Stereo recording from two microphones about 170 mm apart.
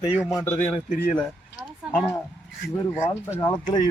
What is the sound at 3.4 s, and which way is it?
Speech, 25° left (ahead or behind).